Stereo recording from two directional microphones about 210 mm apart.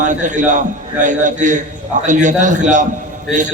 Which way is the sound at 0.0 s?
35° right (ahead or behind).